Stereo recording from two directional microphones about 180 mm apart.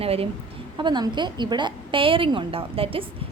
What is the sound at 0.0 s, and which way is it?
A woman's voice, 30° right (ahead or behind).